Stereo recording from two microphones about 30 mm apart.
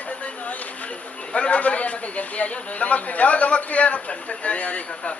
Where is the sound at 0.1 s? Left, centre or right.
Left.